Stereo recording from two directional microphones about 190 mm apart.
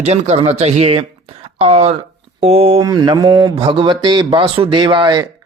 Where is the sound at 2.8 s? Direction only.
20° right (ahead or behind).